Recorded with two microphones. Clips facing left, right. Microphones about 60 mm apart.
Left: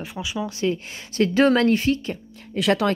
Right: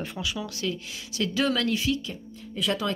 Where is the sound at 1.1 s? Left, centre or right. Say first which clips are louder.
Left 8 dB; left.